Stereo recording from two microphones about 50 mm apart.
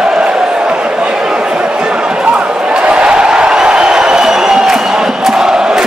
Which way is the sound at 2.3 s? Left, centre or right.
Right.